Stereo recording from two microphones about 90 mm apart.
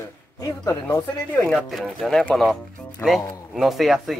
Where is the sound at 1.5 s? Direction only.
Centre (ahead or behind).